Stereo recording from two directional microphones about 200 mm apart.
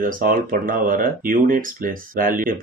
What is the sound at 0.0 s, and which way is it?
Speech, 45° right (ahead or behind).